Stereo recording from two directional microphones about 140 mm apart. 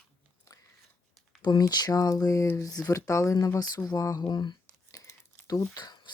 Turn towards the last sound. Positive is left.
turn(degrees=30)  # may be behind; listen again after turning